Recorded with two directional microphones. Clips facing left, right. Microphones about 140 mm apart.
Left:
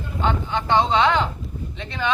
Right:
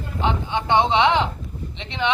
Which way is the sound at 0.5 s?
20° right (ahead or behind).